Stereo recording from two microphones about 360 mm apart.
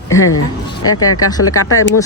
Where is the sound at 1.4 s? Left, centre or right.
Left.